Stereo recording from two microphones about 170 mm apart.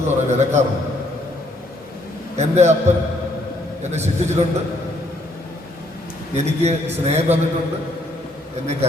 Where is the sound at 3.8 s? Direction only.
40° right (ahead or behind).